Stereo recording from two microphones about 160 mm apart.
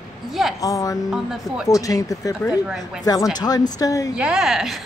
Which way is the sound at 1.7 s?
20° left (ahead or behind).